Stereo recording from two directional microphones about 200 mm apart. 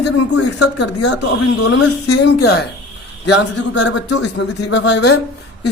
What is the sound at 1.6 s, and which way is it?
Speech, 75° left (ahead or behind).